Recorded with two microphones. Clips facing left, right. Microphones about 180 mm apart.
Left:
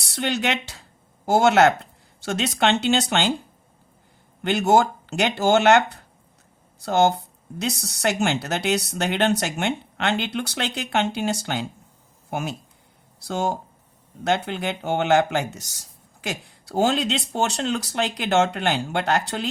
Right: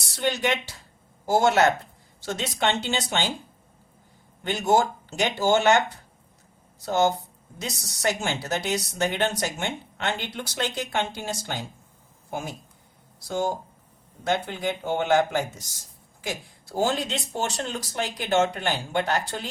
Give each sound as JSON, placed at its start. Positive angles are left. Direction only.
{"t": 0.0, "sound": "speech", "side_deg": 70}
{"t": 4.4, "sound": "speech", "side_deg": 70}